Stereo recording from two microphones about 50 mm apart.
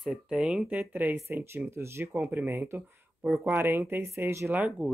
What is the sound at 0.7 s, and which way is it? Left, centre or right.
Speech, right.